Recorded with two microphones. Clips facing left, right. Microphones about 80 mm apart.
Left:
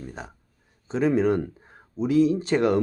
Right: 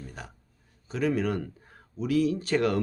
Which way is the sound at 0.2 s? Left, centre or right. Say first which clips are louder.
Left 4 dB; left.